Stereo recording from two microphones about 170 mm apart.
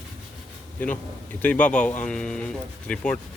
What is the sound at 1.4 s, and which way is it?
Speech, 10° left (ahead or behind).